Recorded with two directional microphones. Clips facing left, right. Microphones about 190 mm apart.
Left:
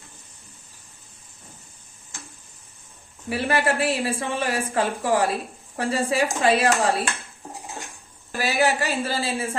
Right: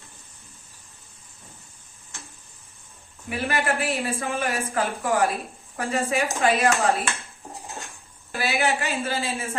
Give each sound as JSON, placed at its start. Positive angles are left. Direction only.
{"t": 3.2, "sound": "a woman's voice", "side_deg": 30}
{"t": 7.7, "sound": "dishes", "side_deg": 15}
{"t": 8.4, "sound": "a woman's voice", "side_deg": 35}